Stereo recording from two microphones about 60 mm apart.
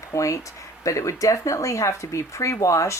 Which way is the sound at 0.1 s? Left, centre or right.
Left.